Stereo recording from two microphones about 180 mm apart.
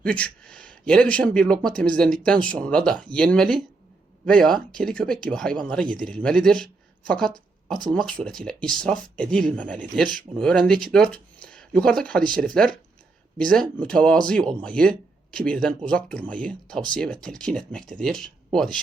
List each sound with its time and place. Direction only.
0.0 s speech: 5° left (ahead or behind)